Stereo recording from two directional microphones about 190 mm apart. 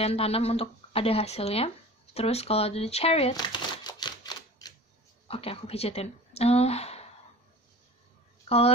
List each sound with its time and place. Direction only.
0.0 s speech: 30° left (ahead or behind)
3.3 s typewriter: 20° left (ahead or behind)
5.3 s speech: 30° left (ahead or behind)
8.5 s speech: 30° left (ahead or behind)